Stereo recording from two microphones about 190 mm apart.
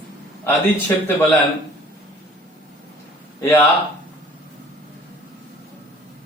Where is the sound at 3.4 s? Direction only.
10° left (ahead or behind).